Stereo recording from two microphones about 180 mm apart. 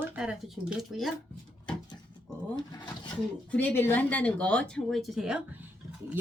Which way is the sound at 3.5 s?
10° left (ahead or behind).